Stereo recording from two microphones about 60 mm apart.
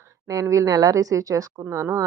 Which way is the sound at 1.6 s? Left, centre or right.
Right.